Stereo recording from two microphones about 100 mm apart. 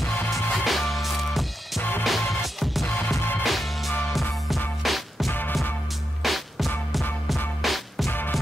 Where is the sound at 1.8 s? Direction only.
20° left (ahead or behind).